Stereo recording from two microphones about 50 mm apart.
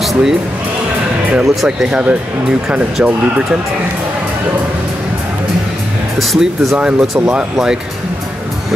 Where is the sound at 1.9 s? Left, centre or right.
Right.